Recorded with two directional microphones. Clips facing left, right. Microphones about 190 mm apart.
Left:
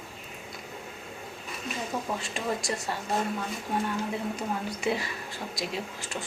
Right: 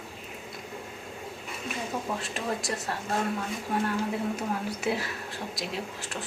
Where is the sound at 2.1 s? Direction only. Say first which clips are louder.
Even; centre (ahead or behind).